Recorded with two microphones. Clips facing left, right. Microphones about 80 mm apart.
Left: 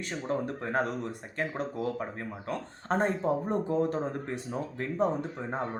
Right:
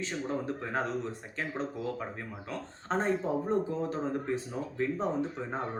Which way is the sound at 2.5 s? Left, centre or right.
Left.